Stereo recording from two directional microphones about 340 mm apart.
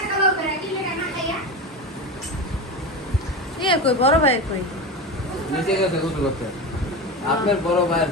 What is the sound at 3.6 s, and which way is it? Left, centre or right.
Speech, centre.